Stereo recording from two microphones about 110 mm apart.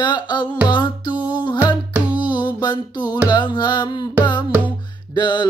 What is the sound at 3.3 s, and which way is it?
Music, 40° left (ahead or behind).